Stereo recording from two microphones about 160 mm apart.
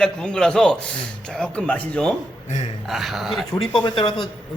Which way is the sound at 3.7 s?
30° left (ahead or behind).